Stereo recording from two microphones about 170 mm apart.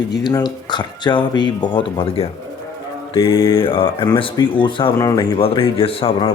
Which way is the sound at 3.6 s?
30° left (ahead or behind).